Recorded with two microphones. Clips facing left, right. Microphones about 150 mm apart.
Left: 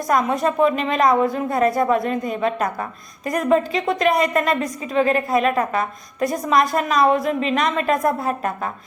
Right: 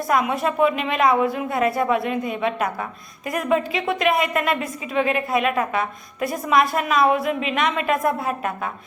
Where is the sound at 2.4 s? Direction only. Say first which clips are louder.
Left 2 dB; 5° right (ahead or behind).